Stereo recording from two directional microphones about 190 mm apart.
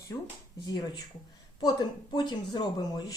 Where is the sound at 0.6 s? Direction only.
20° left (ahead or behind).